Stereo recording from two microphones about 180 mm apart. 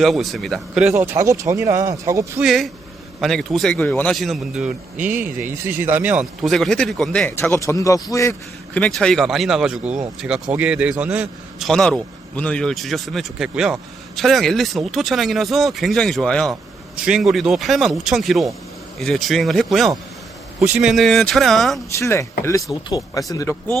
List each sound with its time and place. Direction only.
0.0 s a man's voice: centre (ahead or behind)
0.9 s speech: 15° right (ahead or behind)
2.4 s a man's voice: centre (ahead or behind); by 8.8 s 15° left (ahead or behind)
8.8 s a man's voice: 5° left (ahead or behind)
11.7 s a man's voice: 5° left (ahead or behind)
21.9 s speech: 15° left (ahead or behind)